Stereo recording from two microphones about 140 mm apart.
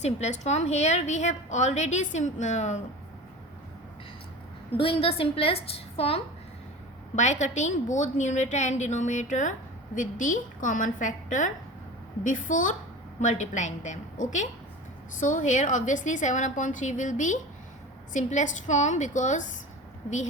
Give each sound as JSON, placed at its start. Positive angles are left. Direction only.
{"t": 0.0, "sound": "a woman's voice", "side_deg": 55}
{"t": 4.8, "sound": "a woman's voice", "side_deg": 40}
{"t": 7.2, "sound": "a woman's voice", "side_deg": 55}